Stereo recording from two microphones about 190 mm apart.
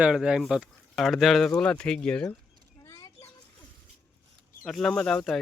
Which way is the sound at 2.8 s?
20° left (ahead or behind).